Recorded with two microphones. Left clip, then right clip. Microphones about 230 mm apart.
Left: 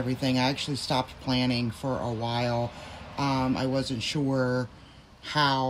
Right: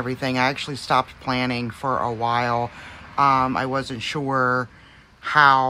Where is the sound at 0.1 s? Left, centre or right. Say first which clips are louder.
Right 5 dB; centre.